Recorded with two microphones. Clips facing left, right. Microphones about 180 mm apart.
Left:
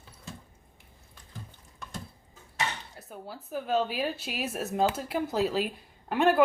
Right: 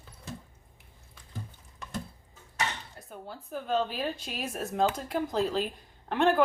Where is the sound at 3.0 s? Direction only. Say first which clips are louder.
Left 1 dB; 5° left (ahead or behind).